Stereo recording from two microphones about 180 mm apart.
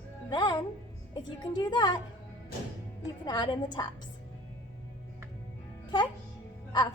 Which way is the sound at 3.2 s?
25° left (ahead or behind).